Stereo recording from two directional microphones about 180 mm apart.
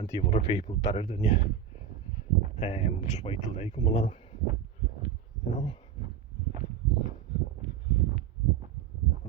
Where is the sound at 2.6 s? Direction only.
35° left (ahead or behind).